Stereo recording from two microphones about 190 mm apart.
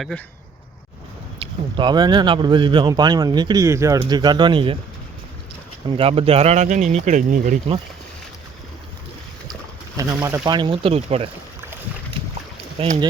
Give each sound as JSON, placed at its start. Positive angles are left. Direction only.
{"t": 1.4, "sound": "speech", "side_deg": -25}
{"t": 6.0, "sound": "speech", "side_deg": -30}
{"t": 10.0, "sound": "speech", "side_deg": -15}
{"t": 12.8, "sound": "speech", "side_deg": -30}